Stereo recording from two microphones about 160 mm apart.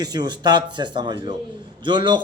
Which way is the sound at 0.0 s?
25° right (ahead or behind).